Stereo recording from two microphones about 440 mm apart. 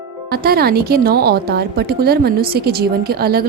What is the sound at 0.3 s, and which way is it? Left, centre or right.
A woman's voice, right.